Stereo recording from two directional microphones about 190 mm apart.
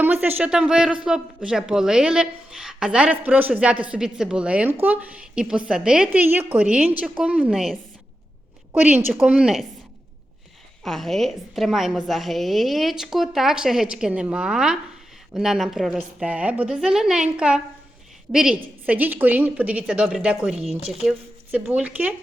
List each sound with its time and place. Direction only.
0.0 s a woman's voice: 10° right (ahead or behind)
10.8 s a woman's voice: centre (ahead or behind)
20.6 s speech: 30° right (ahead or behind)
21.0 s speech: 5° right (ahead or behind)